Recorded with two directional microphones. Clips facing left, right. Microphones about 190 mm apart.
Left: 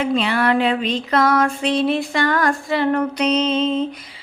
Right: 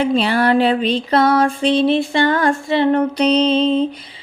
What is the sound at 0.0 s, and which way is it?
Music, 35° right (ahead or behind).